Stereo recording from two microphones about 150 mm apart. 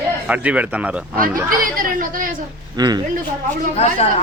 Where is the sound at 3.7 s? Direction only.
45° left (ahead or behind).